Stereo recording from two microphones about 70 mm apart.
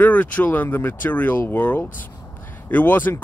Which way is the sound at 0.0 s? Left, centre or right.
Left.